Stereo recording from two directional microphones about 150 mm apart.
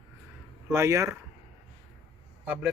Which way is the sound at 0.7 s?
20° right (ahead or behind).